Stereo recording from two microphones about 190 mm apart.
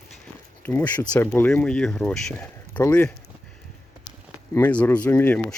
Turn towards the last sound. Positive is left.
turn(degrees=10)  # may be behind; listen again after turning